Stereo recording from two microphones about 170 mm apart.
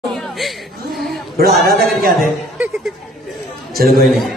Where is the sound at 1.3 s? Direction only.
60° right (ahead or behind).